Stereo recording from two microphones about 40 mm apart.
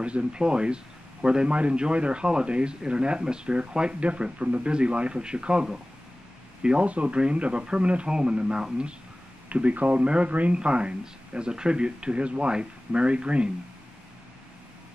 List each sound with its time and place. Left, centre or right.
0.0 s speech: right
6.9 s speech: right
9.5 s speech: right